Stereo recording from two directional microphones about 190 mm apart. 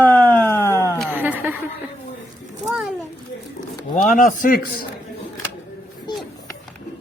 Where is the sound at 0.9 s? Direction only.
10° right (ahead or behind).